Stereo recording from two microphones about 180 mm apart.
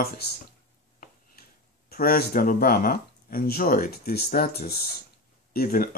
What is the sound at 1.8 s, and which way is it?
Speech, 55° left (ahead or behind).